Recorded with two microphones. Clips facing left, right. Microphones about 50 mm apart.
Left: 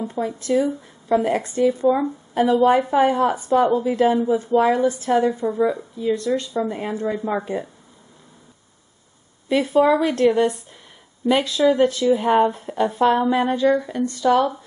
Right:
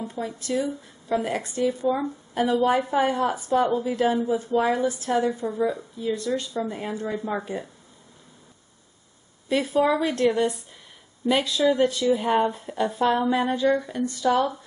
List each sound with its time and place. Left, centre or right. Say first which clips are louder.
0.0 s a woman's voice: left 6 dB; centre
2.0 s a woman's voice: left 5 dB; centre
6.1 s a woman's voice: left 4 dB; centre
6.5 s speech: left 5 dB; centre
9.5 s a woman's voice: left 5 dB; centre